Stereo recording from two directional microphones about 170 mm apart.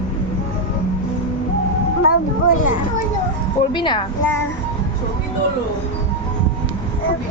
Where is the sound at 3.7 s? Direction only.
30° left (ahead or behind).